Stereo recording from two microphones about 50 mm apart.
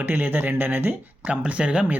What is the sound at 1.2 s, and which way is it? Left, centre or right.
Speech, right.